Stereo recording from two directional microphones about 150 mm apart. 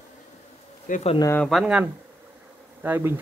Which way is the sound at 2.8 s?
10° right (ahead or behind).